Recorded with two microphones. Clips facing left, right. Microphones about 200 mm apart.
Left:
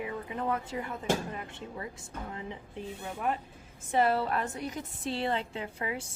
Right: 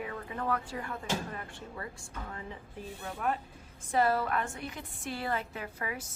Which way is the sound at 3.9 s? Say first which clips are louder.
Left 1 dB; 25° left (ahead or behind).